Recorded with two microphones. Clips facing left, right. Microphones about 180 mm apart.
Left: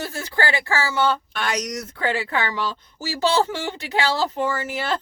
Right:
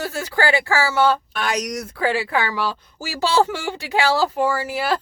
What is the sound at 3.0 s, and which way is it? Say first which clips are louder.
Speech: right 1 dB; 15° right (ahead or behind).